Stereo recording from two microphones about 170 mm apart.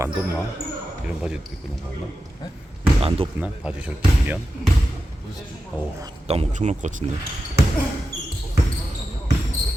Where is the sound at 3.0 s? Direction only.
35° right (ahead or behind).